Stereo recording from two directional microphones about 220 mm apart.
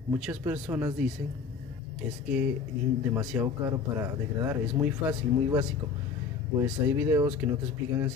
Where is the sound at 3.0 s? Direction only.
10° right (ahead or behind).